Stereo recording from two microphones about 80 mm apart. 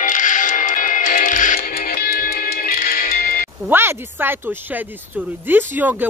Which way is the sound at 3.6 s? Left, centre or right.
Right.